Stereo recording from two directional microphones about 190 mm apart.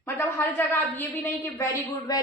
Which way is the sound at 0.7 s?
10° left (ahead or behind).